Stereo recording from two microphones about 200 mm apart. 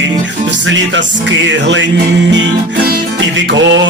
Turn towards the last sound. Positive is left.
turn(degrees=-65)  # may be behind; listen again after turning